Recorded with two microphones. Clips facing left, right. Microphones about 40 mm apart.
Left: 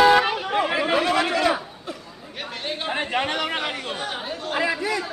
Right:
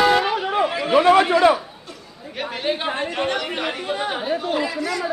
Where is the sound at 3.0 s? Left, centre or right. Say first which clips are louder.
Even; left.